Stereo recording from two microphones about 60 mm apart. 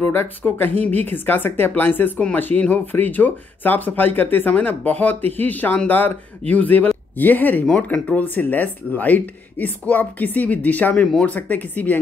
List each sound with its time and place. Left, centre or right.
0.0 s speech: left